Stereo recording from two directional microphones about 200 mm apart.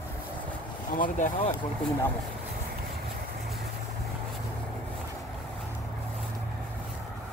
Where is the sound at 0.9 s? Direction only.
40° left (ahead or behind).